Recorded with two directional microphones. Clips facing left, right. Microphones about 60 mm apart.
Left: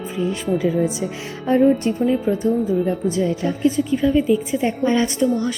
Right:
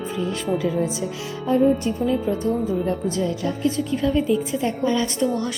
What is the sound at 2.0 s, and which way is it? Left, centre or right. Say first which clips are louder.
A woman's voice: left 3 dB; left.